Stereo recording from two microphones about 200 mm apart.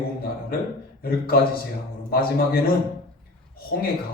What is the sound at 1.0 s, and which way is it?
A man's voice, 50° left (ahead or behind).